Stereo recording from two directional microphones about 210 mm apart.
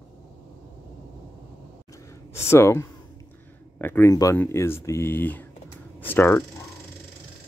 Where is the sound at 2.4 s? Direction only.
10° left (ahead or behind).